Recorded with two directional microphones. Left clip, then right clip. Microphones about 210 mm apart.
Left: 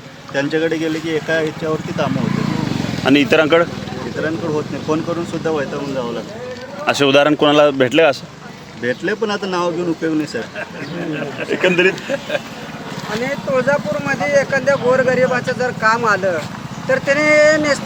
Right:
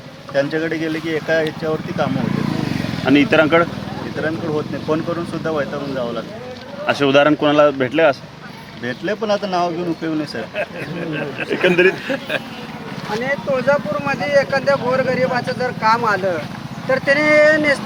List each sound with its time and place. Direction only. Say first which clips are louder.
0.3 s speech: left 1 dB; centre (ahead or behind)
3.0 s speech: left 1 dB; 55° left (ahead or behind)
4.2 s speech: left 1 dB; centre (ahead or behind)
6.8 s speech: left 1 dB; 55° left (ahead or behind)
8.8 s speech: left 3 dB; centre (ahead or behind)
11.4 s a man's voice: even; 15° left (ahead or behind)
13.2 s speech: even; 5° right (ahead or behind)